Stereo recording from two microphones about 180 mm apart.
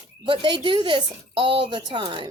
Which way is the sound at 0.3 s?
25° right (ahead or behind).